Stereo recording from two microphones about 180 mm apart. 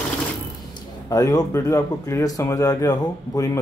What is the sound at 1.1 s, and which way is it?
Speech, 20° left (ahead or behind).